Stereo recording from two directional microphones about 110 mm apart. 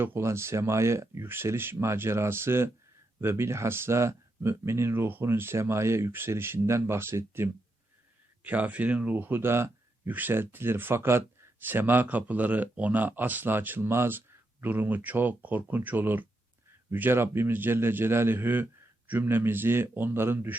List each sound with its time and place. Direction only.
0.0 s speech: 20° right (ahead or behind)